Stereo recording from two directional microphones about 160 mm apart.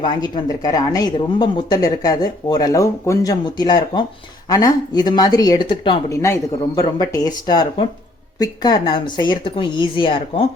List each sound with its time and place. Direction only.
0.0 s speech: 25° left (ahead or behind)
6.1 s speech: 20° left (ahead or behind)